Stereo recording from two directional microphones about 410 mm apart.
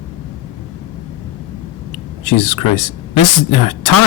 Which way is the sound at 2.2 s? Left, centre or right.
Left.